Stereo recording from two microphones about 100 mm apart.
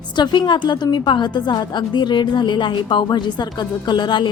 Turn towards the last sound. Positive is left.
turn(degrees=50)  # may be behind; listen again after turning